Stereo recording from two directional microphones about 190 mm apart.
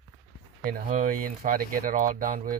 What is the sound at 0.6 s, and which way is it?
Speech, 45° right (ahead or behind).